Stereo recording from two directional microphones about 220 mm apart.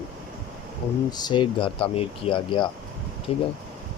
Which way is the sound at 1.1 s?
20° left (ahead or behind).